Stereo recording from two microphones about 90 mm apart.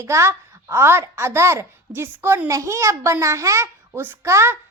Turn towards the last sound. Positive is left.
turn(degrees=-30)  # may be behind; listen again after turning